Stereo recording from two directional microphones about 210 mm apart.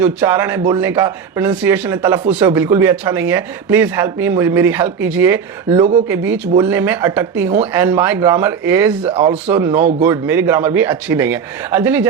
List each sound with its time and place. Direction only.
0.0 s speech: 10° right (ahead or behind)
5.7 s speech: 30° right (ahead or behind)
6.1 s speech: 10° right (ahead or behind)